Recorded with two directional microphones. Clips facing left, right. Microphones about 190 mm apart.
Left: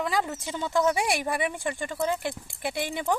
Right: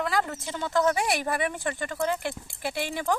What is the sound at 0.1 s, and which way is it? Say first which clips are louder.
Speech: even; 10° left (ahead or behind).